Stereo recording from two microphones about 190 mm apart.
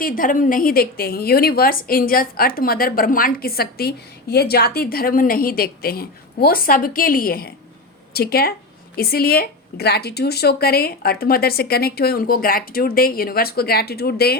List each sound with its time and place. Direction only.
0.0 s a woman's voice: 45° left (ahead or behind)